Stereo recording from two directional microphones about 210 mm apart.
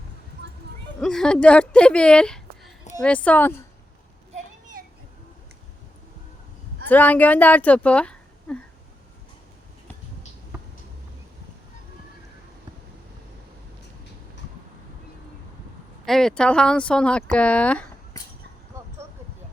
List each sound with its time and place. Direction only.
1.0 s a woman's voice: 5° left (ahead or behind)
4.4 s a sound: 40° right (ahead or behind)
6.8 s speech: 10° left (ahead or behind)
16.0 s speech: centre (ahead or behind)